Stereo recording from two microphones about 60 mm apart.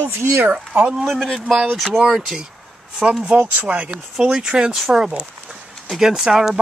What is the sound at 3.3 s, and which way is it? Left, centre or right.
Speech, right.